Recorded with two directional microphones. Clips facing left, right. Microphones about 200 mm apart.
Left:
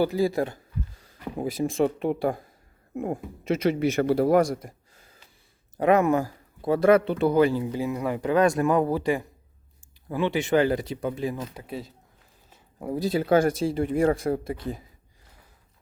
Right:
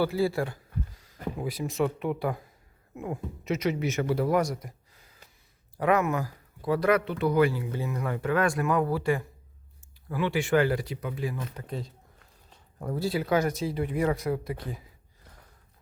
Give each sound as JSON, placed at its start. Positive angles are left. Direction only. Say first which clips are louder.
{"t": 0.0, "sound": "speech", "louder": "left 3 dB", "side_deg": 15}
{"t": 3.4, "sound": "speech", "louder": "left 4 dB", "side_deg": 30}
{"t": 4.2, "sound": "speech", "louder": "left 6 dB", "side_deg": 50}
{"t": 5.7, "sound": "speech", "louder": "left 5 dB", "side_deg": 25}
{"t": 7.8, "sound": "speech", "louder": "left 4 dB", "side_deg": 15}
{"t": 11.5, "sound": "speech", "louder": "left 1 dB", "side_deg": 10}
{"t": 13.9, "sound": "speech", "louder": "left 5 dB", "side_deg": 45}
{"t": 14.2, "sound": "speech", "louder": "left 3 dB", "side_deg": 30}